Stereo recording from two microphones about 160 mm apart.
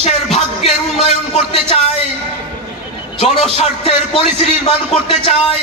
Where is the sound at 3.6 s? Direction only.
40° left (ahead or behind).